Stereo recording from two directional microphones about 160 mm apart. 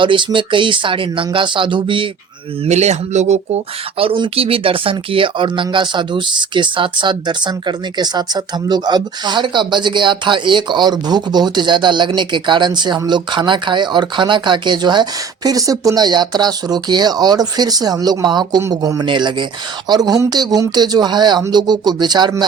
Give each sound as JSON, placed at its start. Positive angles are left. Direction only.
{"t": 0.0, "sound": "speech", "side_deg": -30}
{"t": 2.6, "sound": "speech", "side_deg": -45}